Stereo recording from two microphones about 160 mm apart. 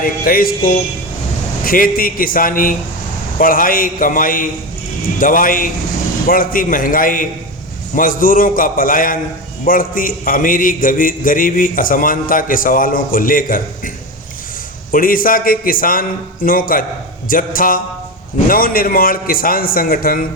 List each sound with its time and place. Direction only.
0.0 s a man's voice: 65° left (ahead or behind)
14.9 s a man's voice: 60° left (ahead or behind)